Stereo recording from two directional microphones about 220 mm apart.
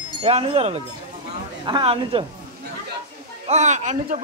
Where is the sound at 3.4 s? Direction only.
30° right (ahead or behind).